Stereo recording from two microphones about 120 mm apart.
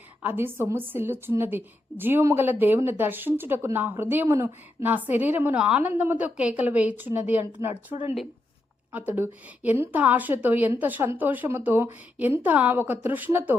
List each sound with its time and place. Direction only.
0.2 s a woman's voice: 15° right (ahead or behind)
8.9 s a woman's voice: 15° right (ahead or behind)